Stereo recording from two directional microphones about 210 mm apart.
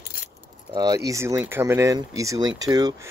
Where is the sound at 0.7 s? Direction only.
15° right (ahead or behind).